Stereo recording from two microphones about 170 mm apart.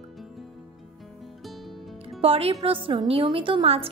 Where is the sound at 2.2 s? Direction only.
35° right (ahead or behind).